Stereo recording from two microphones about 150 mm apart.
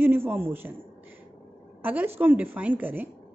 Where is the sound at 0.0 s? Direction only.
15° right (ahead or behind).